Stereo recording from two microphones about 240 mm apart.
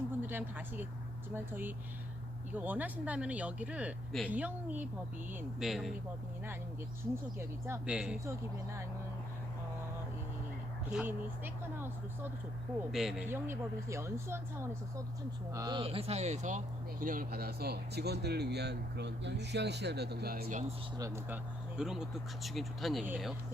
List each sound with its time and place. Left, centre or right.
0.2 s speech: centre
7.3 s speech: centre
10.8 s speech: centre; by 20.7 s right
21.0 s speech: centre